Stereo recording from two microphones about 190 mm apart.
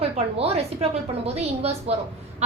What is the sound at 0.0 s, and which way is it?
A woman's voice, 30° right (ahead or behind).